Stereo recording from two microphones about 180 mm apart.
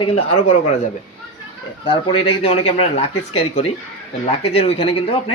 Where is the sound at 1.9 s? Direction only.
30° left (ahead or behind).